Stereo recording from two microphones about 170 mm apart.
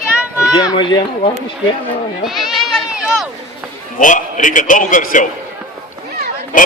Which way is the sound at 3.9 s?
50° left (ahead or behind).